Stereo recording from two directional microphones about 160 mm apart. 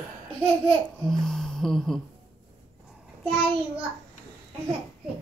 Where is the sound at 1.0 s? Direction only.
5° left (ahead or behind).